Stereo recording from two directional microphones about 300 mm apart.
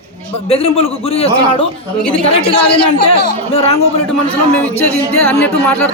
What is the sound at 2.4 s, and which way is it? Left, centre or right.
Speech, left.